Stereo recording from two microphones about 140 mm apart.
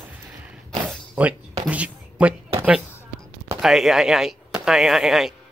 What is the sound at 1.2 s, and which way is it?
Speech, 10° right (ahead or behind).